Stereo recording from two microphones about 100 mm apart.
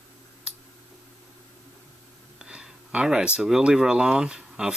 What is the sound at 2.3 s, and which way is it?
Speech, 5° right (ahead or behind).